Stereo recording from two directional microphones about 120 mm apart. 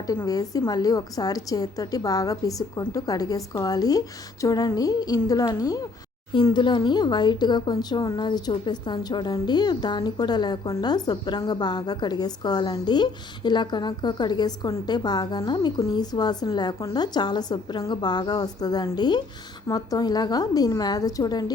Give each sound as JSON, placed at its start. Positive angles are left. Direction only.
{"t": 0.3, "sound": "speech", "side_deg": 30}